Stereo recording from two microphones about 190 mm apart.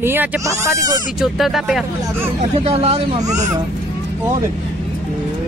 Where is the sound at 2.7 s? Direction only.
30° right (ahead or behind).